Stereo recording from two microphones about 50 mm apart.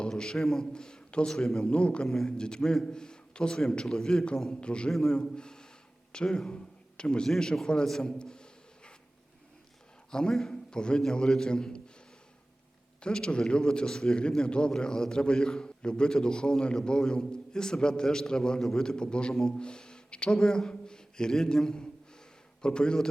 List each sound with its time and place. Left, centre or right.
0.0 s a man's voice: centre
1.7 s a man's voice: left
2.0 s speech: centre
2.4 s a man's voice: centre
4.6 s a man's voice: left
6.5 s a sound: centre
7.3 s a man's voice: centre
10.1 s a man's voice: centre
13.0 s a man's voice: centre
19.3 s speech: centre
19.5 s a man's voice: centre